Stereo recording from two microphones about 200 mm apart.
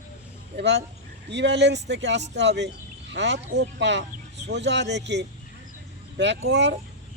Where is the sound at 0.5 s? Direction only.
60° right (ahead or behind).